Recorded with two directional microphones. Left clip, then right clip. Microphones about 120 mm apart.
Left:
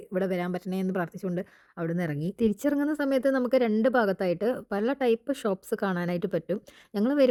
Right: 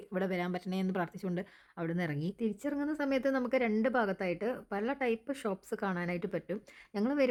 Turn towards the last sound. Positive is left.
turn(degrees=40)  # may be behind; listen again after turning